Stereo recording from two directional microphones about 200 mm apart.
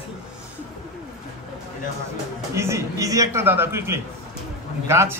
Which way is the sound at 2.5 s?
15° right (ahead or behind).